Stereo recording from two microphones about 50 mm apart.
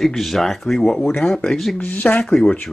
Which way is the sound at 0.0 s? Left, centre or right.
Centre.